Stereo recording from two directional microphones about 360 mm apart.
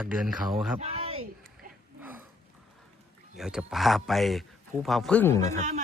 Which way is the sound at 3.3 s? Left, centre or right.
Centre.